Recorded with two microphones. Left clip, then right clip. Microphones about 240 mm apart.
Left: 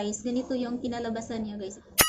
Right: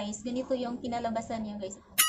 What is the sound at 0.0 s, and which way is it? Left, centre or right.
A woman's voice, centre.